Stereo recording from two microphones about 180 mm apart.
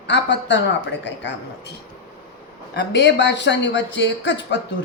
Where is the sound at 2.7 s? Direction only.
75° left (ahead or behind).